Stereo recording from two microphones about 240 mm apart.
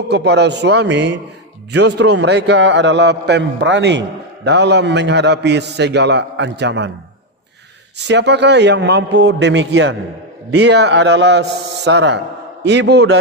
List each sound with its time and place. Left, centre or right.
0.1 s a man's voice: right
8.0 s a man's voice: right